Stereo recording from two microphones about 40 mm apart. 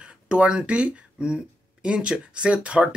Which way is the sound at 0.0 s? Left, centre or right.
Right.